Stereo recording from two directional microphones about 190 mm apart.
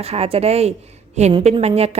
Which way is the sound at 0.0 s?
30° right (ahead or behind).